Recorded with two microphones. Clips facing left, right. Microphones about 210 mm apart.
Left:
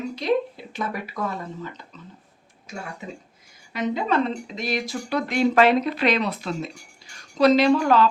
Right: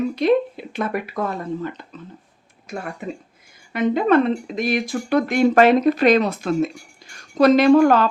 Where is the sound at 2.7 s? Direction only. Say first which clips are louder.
Right 6 dB; 55° right (ahead or behind).